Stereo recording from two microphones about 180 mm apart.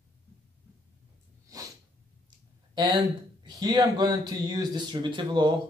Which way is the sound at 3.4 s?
20° right (ahead or behind).